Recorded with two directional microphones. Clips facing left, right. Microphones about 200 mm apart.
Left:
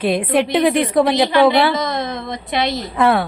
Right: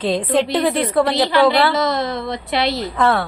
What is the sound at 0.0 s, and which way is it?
A woman's voice, 10° left (ahead or behind).